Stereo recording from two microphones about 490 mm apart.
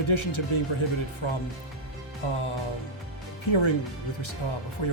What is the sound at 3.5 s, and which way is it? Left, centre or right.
Speech, left.